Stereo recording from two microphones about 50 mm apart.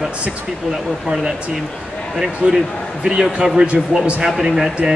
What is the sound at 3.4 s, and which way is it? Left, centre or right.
Speech, centre.